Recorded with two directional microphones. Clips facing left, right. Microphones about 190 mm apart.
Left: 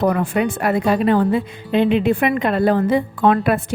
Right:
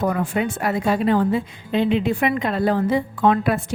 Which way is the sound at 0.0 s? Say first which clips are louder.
Left 4 dB; 65° left (ahead or behind).